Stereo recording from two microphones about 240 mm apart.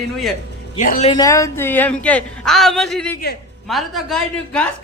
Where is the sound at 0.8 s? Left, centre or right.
Left.